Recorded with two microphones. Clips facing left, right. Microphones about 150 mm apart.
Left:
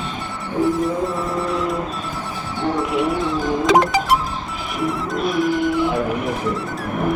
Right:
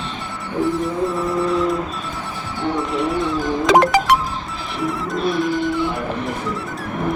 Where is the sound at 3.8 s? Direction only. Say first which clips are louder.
Right 3 dB; 75° right (ahead or behind).